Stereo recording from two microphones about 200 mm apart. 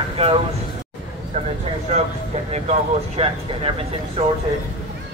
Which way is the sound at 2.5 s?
30° right (ahead or behind).